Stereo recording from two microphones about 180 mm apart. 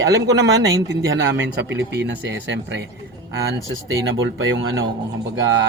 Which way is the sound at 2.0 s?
80° right.